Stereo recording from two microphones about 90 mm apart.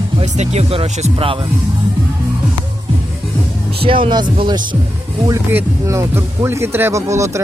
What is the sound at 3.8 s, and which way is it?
Speech, 80° right.